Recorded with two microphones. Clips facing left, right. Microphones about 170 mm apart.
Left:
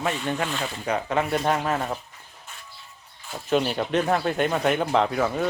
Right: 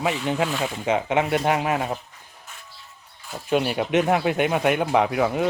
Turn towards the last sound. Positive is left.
turn(degrees=-15)  # may be behind; listen again after turning